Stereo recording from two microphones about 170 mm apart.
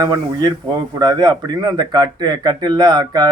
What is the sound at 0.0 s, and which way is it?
Speech, 25° right (ahead or behind).